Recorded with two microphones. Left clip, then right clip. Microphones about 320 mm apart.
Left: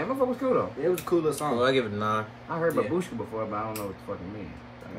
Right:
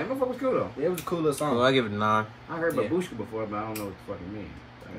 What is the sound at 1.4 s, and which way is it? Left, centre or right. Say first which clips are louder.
Speech: right 1 dB; centre.